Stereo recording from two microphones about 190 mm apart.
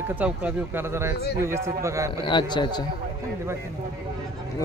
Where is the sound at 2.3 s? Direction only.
25° left (ahead or behind).